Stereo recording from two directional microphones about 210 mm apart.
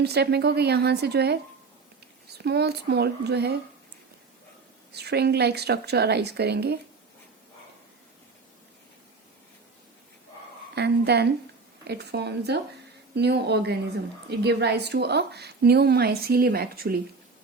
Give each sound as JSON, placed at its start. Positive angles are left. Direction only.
{"t": 0.0, "sound": "a woman's voice", "side_deg": -50}
{"t": 2.4, "sound": "a woman's voice", "side_deg": -50}
{"t": 4.9, "sound": "a woman's voice", "side_deg": -50}
{"t": 10.8, "sound": "a woman's voice", "side_deg": -50}